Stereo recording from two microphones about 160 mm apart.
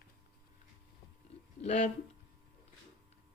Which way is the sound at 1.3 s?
45° left (ahead or behind).